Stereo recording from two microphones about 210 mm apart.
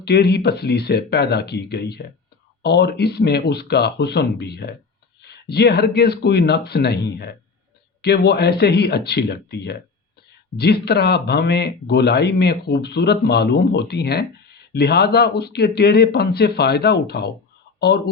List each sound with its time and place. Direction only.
0.0 s speech: 50° left (ahead or behind)